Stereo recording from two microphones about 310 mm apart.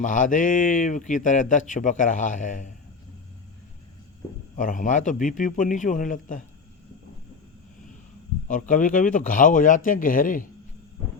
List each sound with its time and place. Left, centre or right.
0.0 s speech: left
4.5 s speech: left
8.4 s speech: left